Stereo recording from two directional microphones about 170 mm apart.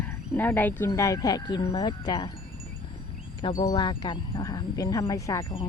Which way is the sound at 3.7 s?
25° left (ahead or behind).